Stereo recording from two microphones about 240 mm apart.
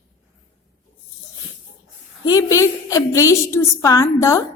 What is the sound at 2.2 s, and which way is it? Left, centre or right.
A woman's voice, centre.